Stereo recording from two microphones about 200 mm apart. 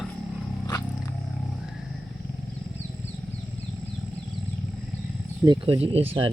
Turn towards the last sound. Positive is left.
turn(degrees=-30)  # may be behind; listen again after turning